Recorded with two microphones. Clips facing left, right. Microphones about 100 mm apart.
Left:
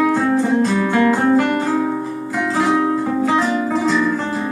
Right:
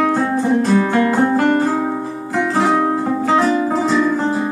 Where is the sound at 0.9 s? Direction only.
20° right (ahead or behind).